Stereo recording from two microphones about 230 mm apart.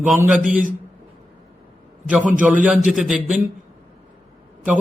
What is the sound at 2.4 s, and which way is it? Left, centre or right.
Speech, centre.